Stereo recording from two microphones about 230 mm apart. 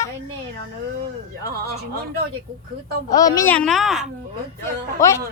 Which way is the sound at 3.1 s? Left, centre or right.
Centre.